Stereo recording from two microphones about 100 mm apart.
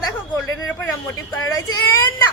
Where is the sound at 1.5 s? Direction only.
30° left (ahead or behind).